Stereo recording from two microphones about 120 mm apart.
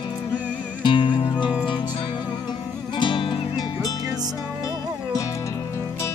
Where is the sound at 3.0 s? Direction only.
45° left (ahead or behind).